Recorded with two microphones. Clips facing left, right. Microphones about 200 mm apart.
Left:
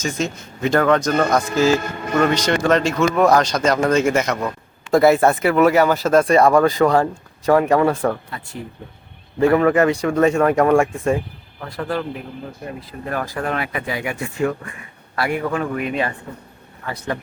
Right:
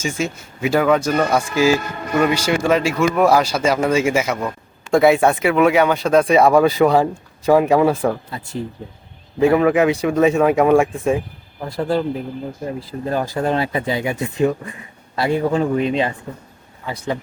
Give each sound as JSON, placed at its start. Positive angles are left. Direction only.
{"t": 0.0, "sound": "speech", "side_deg": -10}
{"t": 9.4, "sound": "speech", "side_deg": -10}
{"t": 11.6, "sound": "speech", "side_deg": -25}
{"t": 16.8, "sound": "speech", "side_deg": -15}